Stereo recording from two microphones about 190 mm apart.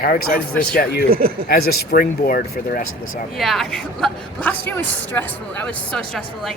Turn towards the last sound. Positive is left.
turn(degrees=0)  # may be behind; listen again after turning